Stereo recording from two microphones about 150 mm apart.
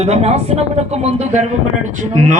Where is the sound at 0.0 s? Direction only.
45° right (ahead or behind).